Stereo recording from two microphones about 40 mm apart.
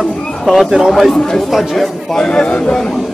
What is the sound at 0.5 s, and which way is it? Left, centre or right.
Speech, centre.